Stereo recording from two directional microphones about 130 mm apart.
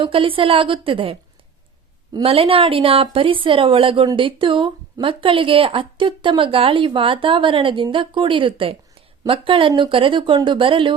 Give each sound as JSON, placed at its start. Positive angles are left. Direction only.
{"t": 0.0, "sound": "a woman's voice", "side_deg": -40}
{"t": 2.2, "sound": "a woman's voice", "side_deg": -45}